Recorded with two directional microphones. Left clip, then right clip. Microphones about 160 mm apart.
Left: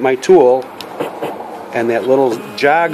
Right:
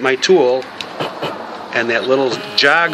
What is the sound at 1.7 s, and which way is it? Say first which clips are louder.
Speech: left 1 dB; 40° left (ahead or behind).